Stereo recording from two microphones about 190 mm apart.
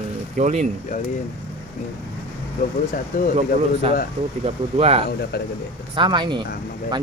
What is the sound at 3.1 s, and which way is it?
Speech, 45° left (ahead or behind).